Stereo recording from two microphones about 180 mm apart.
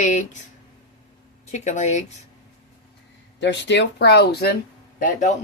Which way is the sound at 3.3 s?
80° left.